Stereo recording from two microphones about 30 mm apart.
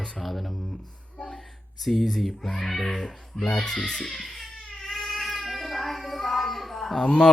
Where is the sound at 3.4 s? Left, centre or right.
Left.